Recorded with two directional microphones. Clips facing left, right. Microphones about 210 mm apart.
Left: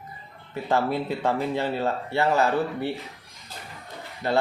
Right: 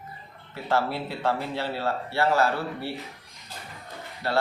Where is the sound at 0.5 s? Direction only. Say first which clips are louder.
Left 2 dB; 15° left (ahead or behind).